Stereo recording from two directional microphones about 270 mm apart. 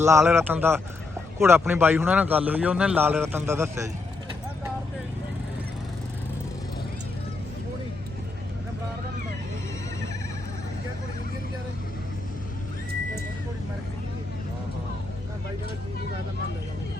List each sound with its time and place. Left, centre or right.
0.2 s a man's voice: centre